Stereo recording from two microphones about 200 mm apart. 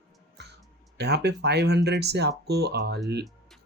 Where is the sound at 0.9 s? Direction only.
55° right (ahead or behind).